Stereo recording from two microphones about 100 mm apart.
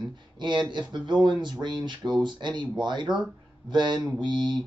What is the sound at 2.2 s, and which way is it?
Speech, 50° right (ahead or behind).